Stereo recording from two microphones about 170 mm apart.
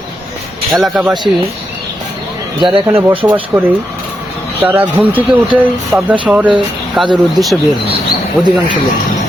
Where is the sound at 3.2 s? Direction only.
30° right (ahead or behind).